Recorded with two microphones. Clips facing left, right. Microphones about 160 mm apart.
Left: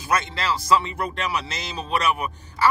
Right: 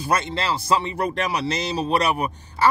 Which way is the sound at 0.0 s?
30° right (ahead or behind).